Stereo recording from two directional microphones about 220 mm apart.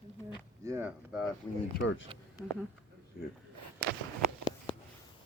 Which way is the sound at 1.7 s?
60° left (ahead or behind).